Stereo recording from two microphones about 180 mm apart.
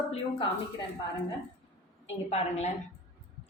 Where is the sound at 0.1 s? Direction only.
30° left (ahead or behind).